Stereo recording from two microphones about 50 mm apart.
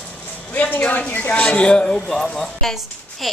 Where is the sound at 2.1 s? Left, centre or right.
Centre.